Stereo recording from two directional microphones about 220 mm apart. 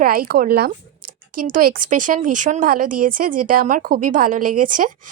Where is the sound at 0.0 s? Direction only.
40° right (ahead or behind).